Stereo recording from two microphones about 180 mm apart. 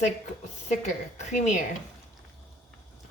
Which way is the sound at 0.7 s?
40° left (ahead or behind).